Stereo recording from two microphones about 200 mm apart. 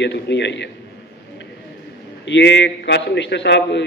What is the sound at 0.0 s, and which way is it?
Speech, 60° left (ahead or behind).